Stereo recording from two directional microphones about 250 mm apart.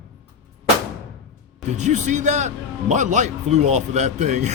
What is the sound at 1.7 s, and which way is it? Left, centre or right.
A man's voice, right.